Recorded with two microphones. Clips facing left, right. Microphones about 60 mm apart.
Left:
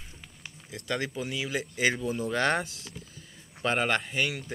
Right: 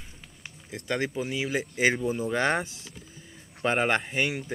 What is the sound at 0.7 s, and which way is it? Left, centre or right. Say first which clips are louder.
Speech: right 2 dB; right.